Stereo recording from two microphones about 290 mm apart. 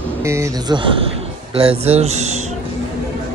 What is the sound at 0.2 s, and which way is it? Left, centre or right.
A man's voice, centre.